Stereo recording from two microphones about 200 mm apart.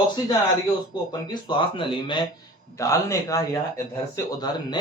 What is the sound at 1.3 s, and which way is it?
A man's voice, 25° left (ahead or behind).